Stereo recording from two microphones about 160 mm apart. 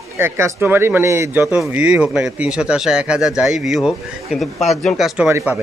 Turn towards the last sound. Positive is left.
turn(degrees=-10)  # may be behind; listen again after turning